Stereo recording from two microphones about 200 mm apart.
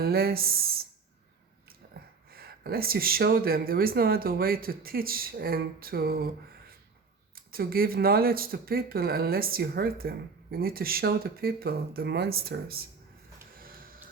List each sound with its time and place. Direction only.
0.0 s speech: 50° right (ahead or behind)
1.9 s speech: 50° right (ahead or behind)
7.3 s speech: 50° right (ahead or behind)
13.6 s a sound: 45° right (ahead or behind)